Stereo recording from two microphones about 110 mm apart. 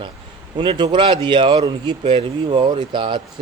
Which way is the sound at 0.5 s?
45° right (ahead or behind).